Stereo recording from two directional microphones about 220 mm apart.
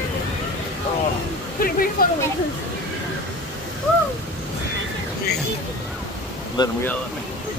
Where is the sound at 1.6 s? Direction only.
40° left (ahead or behind).